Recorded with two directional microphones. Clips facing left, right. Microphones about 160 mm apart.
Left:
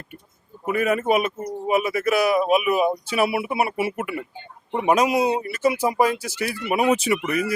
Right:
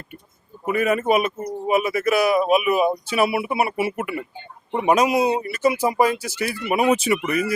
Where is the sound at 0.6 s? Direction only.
15° right (ahead or behind).